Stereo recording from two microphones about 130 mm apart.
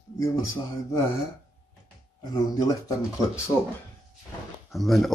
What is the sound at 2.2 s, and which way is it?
Speech, 30° left (ahead or behind).